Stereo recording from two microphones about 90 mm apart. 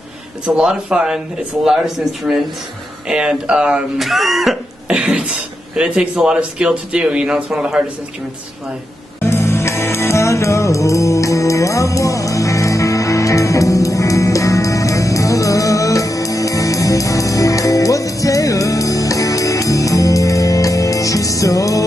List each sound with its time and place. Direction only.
0.5 s speech: 10° right (ahead or behind)
4.8 s beatboxing: 15° right (ahead or behind)
5.8 s speech: 10° right (ahead or behind)
9.2 s music: 30° left (ahead or behind)